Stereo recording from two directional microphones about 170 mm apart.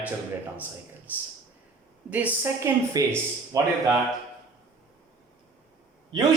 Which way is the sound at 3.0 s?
20° right (ahead or behind).